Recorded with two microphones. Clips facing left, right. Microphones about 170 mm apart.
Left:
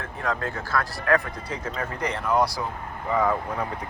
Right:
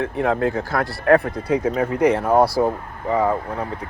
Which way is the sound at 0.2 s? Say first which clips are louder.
Right 8 dB; 55° right (ahead or behind).